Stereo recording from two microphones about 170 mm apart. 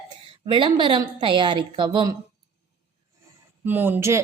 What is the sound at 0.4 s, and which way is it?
A woman's voice, 30° right (ahead or behind).